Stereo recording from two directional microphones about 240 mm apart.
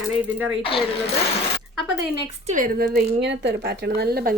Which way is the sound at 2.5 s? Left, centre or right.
Right.